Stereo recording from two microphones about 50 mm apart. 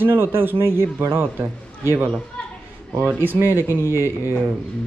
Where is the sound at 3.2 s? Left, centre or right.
Right.